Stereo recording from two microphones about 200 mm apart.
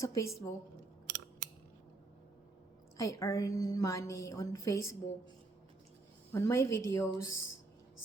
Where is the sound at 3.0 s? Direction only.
15° left (ahead or behind).